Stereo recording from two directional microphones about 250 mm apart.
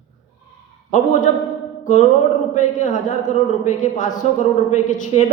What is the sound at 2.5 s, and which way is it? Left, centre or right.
A woman's voice, left.